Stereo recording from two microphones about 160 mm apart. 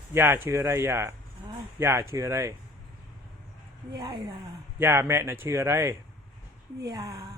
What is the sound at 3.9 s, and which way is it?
Speech, 25° right (ahead or behind).